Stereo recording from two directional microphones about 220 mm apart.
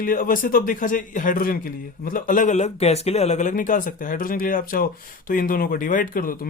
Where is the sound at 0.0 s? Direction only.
40° left (ahead or behind).